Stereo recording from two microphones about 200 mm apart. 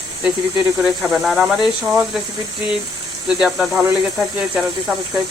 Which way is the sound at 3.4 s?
Centre (ahead or behind).